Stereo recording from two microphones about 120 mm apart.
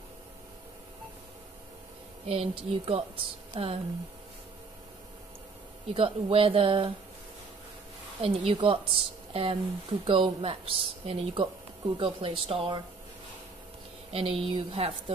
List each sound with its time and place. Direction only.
2.2 s a woman's voice: 50° right (ahead or behind)
5.9 s a woman's voice: 50° right (ahead or behind)
8.2 s a woman's voice: 50° right (ahead or behind)
14.1 s a woman's voice: 55° right (ahead or behind)